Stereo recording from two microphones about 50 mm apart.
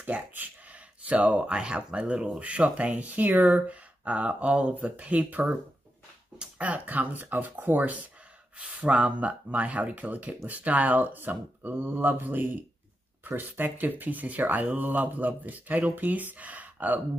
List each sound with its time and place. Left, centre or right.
0.3 s speech: right
6.6 s speech: right
8.5 s speech: right